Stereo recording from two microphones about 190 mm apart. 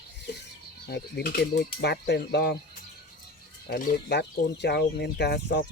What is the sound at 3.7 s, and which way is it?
Speech, 50° left (ahead or behind).